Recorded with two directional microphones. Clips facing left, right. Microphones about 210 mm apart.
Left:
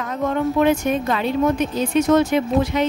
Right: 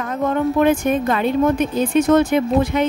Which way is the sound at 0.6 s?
50° right (ahead or behind).